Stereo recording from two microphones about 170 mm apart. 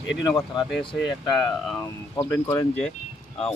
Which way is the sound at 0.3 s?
25° left (ahead or behind).